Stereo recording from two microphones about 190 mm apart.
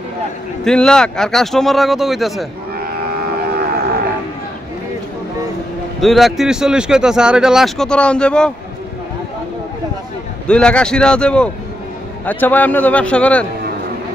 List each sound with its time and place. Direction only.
0.7 s speech: 5° left (ahead or behind)
2.8 s livestock: 55° right (ahead or behind)
5.9 s speech: centre (ahead or behind)
10.5 s a man's voice: 5° left (ahead or behind)